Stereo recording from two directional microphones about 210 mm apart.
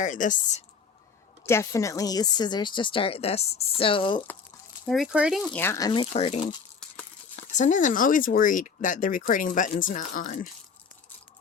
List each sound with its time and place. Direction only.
0.0 s speech: 35° left (ahead or behind)
1.5 s a woman's voice: 15° left (ahead or behind)
4.9 s speech: centre (ahead or behind)
5.5 s a woman's voice: 15° left (ahead or behind); by 6.4 s 30° left (ahead or behind)
6.4 s a sound: 5° left (ahead or behind)
7.5 s speech: 35° left (ahead or behind)